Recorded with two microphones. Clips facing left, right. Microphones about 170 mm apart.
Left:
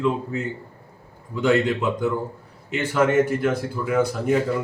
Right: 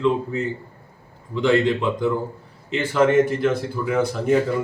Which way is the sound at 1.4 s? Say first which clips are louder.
Right 1 dB; 5° left (ahead or behind).